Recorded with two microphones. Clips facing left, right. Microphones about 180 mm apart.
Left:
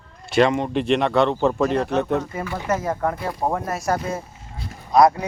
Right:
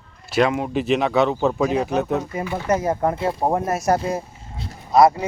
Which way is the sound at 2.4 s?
20° right (ahead or behind).